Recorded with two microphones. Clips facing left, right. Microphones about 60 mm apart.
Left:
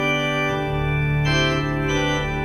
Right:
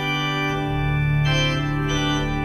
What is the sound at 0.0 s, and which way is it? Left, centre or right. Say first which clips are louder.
Organ: left 2 dB; centre.